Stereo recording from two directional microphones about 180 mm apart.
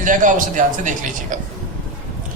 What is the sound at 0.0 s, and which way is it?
Speech, 45° right (ahead or behind).